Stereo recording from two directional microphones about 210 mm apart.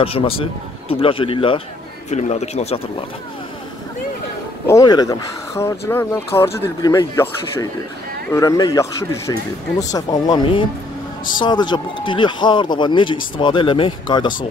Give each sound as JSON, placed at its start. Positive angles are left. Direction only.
{"t": 0.0, "sound": "speech", "side_deg": 25}
{"t": 4.6, "sound": "speech", "side_deg": 15}